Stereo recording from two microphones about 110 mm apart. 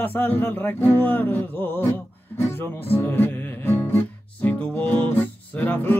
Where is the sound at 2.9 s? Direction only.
20° left (ahead or behind).